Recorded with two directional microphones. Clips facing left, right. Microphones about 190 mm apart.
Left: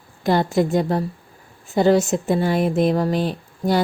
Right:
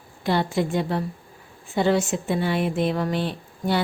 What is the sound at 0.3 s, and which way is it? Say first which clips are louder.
A woman's voice: left 5 dB; 45° left (ahead or behind).